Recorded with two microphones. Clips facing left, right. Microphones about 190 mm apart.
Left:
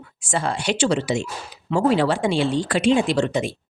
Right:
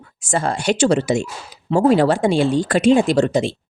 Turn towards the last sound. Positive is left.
turn(degrees=-35)  # may be behind; listen again after turning